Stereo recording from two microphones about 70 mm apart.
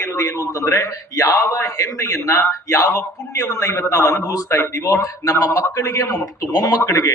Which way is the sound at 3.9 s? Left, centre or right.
Left.